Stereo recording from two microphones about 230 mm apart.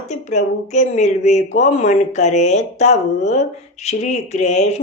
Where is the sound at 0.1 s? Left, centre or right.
Left.